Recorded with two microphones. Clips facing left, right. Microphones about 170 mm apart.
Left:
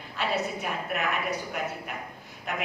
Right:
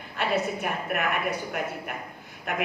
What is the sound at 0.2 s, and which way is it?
A woman's voice, 50° right (ahead or behind).